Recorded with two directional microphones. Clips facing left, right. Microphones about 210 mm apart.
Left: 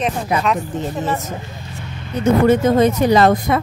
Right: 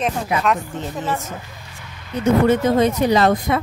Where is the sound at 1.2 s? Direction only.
35° left (ahead or behind).